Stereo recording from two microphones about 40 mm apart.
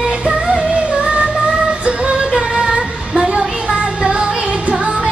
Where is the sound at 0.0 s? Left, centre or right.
Centre.